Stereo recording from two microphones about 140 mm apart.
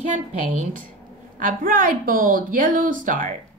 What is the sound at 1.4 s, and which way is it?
A woman's voice, 80° right.